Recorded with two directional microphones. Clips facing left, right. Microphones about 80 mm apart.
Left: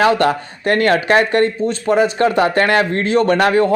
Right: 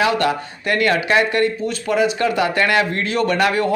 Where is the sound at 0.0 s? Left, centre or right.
Left.